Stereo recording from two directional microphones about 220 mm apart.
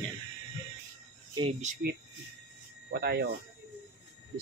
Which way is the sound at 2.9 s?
45° right (ahead or behind).